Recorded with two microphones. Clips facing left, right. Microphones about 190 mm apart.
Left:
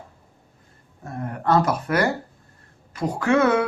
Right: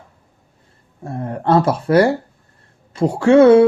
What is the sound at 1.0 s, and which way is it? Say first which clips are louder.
Speech: right 5 dB; 30° right (ahead or behind).